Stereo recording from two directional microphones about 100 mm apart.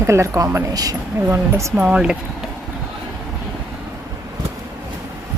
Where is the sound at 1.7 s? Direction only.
10° right (ahead or behind).